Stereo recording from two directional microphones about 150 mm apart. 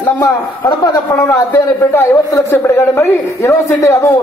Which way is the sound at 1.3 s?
15° left (ahead or behind).